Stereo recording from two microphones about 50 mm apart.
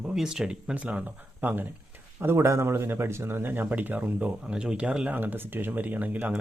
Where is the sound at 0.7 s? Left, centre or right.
Right.